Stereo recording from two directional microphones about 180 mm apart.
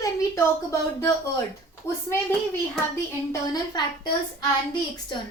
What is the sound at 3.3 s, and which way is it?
Speech, 25° left (ahead or behind).